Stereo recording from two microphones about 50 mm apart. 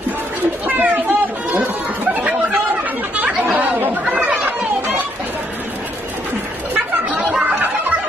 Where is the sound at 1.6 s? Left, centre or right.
Right.